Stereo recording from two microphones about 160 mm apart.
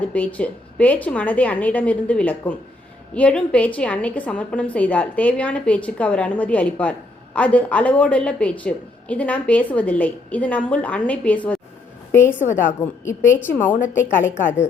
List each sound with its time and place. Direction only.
0.1 s a woman's voice: 10° left (ahead or behind)